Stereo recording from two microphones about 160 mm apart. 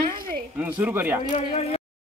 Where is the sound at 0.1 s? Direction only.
60° right (ahead or behind).